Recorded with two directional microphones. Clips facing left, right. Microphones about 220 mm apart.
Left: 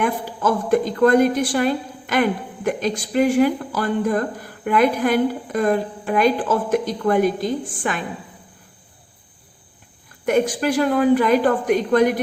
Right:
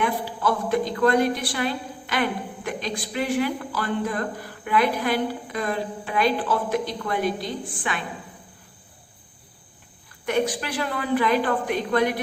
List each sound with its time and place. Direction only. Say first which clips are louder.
0.0 s speech: left 3 dB; 45° left (ahead or behind)
10.2 s speech: left 6 dB; 45° left (ahead or behind)